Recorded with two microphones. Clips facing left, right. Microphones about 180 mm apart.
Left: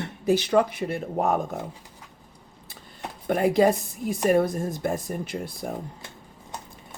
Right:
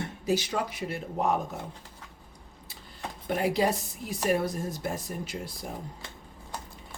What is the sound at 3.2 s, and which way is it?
Speech, 50° left (ahead or behind).